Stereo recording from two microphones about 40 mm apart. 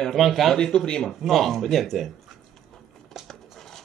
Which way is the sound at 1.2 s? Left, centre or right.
Centre.